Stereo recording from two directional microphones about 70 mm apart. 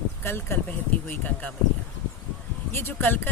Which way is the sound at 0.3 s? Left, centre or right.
Left.